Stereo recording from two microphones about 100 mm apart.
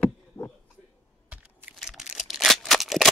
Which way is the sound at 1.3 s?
20° right (ahead or behind).